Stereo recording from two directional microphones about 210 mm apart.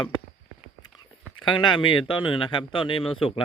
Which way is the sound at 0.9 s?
20° left (ahead or behind).